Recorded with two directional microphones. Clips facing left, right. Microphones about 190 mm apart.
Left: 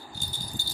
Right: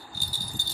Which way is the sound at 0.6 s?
20° right (ahead or behind).